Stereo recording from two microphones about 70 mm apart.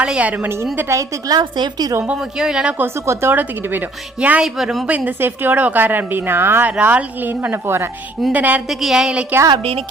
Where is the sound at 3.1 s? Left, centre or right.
Right.